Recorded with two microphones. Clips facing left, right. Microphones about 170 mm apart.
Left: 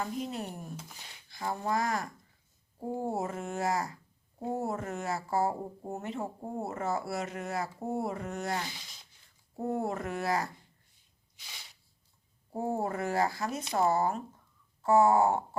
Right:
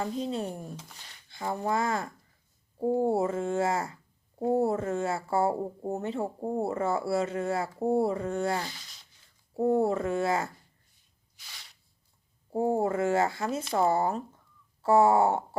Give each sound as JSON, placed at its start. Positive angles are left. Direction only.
{"t": 0.0, "sound": "speech", "side_deg": -30}
{"t": 12.5, "sound": "speech", "side_deg": -25}